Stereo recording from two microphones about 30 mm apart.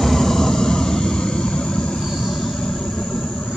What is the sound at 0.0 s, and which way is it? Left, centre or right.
Vehicle, centre.